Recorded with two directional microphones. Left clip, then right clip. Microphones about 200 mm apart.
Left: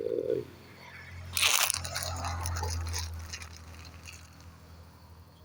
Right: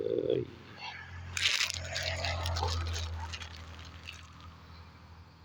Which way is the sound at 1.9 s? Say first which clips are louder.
Right 2 dB; 30° left (ahead or behind).